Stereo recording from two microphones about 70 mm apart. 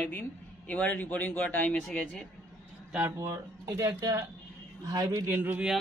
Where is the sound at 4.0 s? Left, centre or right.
Right.